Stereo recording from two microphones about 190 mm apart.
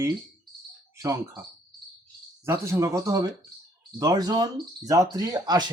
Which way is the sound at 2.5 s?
15° right (ahead or behind).